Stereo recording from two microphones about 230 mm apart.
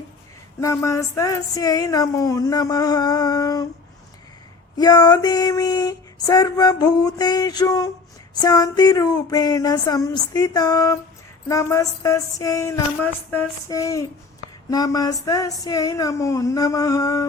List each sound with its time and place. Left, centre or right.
0.6 s a woman's voice: centre
4.8 s a woman's voice: centre